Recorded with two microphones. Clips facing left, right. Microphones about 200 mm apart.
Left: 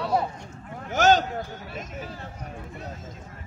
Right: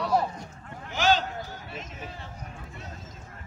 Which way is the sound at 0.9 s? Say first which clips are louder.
Left 5 dB; 45° left (ahead or behind).